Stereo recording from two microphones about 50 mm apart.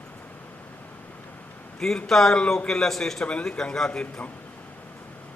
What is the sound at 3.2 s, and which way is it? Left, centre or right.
Speech, left.